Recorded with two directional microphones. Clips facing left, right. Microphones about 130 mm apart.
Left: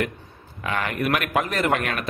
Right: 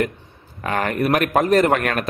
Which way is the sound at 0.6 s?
45° right (ahead or behind).